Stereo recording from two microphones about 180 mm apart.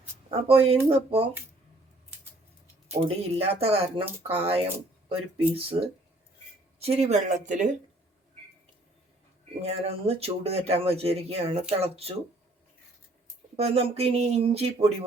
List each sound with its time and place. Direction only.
0.3 s speech: 30° right (ahead or behind)
2.9 s speech: 35° right (ahead or behind)
9.6 s speech: 35° right (ahead or behind)
13.6 s speech: 35° right (ahead or behind)